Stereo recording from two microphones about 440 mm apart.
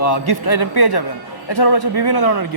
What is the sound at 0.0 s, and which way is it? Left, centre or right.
A man's voice, left.